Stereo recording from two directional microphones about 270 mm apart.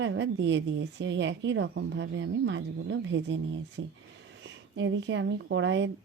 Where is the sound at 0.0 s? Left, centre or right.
Right.